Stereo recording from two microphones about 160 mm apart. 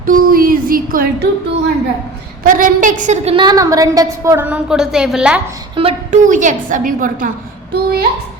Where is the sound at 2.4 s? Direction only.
55° right (ahead or behind).